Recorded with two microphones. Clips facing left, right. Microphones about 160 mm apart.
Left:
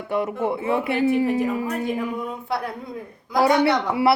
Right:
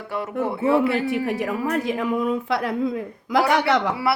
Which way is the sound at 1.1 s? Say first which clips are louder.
Left 3 dB; 75° right (ahead or behind).